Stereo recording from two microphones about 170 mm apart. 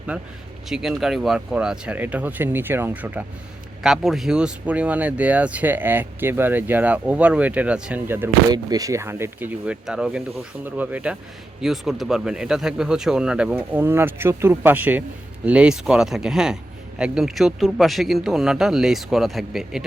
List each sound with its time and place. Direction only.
0.1 s speech: 5° right (ahead or behind)